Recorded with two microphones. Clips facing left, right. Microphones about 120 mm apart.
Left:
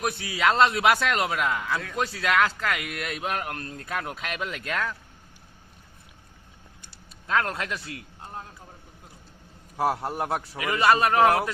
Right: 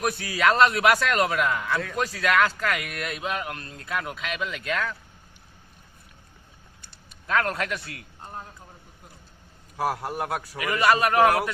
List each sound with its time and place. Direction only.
0.0 s a man's voice: 20° left (ahead or behind)
3.3 s a man's voice: 45° left (ahead or behind)
3.9 s speech: 30° left (ahead or behind)
7.3 s a man's voice: 25° left (ahead or behind)
9.7 s a man's voice: 20° left (ahead or behind)